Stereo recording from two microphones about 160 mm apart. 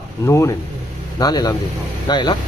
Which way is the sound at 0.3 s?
15° left (ahead or behind).